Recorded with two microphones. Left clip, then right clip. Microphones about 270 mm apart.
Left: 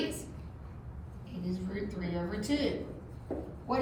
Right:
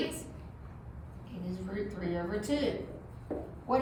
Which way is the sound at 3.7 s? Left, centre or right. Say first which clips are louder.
Right 2 dB; centre.